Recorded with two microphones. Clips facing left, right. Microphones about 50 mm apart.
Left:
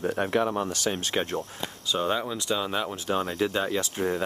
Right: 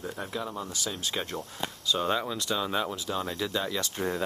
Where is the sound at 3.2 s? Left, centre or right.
Left.